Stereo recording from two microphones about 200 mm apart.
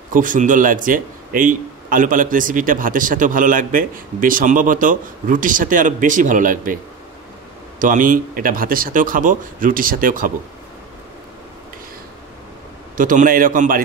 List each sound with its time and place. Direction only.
0.1 s speech: 40° right (ahead or behind)
7.8 s speech: 40° right (ahead or behind)
12.9 s speech: 40° right (ahead or behind)